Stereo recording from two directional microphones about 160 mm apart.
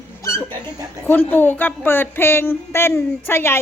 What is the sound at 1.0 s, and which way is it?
Speech, 10° left (ahead or behind).